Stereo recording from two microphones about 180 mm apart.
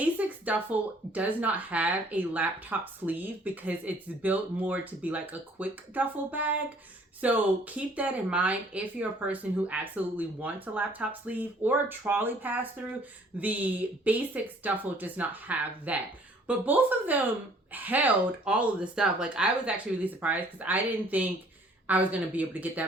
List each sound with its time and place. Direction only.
0.0 s speech: 10° right (ahead or behind)